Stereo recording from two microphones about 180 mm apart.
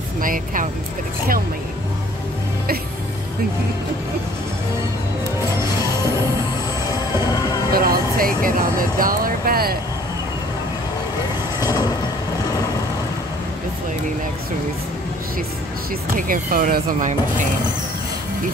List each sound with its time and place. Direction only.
0.2 s speech: 50° right (ahead or behind)
6.9 s music: 20° left (ahead or behind)
7.7 s vehicle: 55° right (ahead or behind)
9.0 s speech: 55° right (ahead or behind)
11.6 s vehicle: 20° left (ahead or behind)
16.2 s speech: 50° right (ahead or behind)